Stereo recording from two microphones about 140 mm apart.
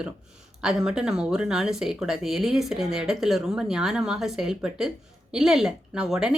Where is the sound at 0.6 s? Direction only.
5° right (ahead or behind).